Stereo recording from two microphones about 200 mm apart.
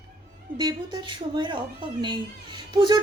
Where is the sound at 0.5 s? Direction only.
20° right (ahead or behind).